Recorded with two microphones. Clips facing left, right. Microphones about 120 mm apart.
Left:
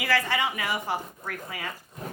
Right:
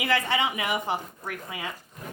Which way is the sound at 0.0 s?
20° right (ahead or behind).